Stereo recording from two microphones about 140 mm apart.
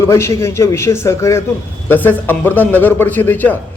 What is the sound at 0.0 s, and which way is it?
A man's voice, 20° left (ahead or behind).